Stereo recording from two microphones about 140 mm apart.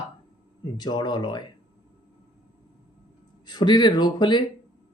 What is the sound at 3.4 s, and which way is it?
Speech, 30° left (ahead or behind).